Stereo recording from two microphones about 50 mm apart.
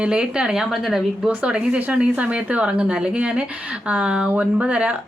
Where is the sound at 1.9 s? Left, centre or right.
Right.